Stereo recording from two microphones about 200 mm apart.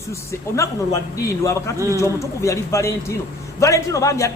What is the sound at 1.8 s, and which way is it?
Speech, 15° right (ahead or behind).